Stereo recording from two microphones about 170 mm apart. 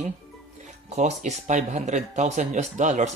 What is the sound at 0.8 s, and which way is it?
Speech, 40° right (ahead or behind).